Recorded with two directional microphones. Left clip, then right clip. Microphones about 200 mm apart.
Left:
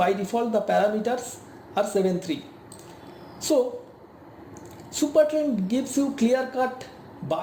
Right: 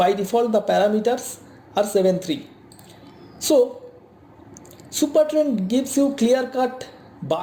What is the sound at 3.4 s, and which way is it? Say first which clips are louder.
Speech: right 5 dB; 50° right (ahead or behind).